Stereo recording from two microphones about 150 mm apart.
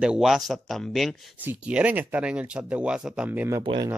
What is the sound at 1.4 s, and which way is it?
Speech, 10° right (ahead or behind).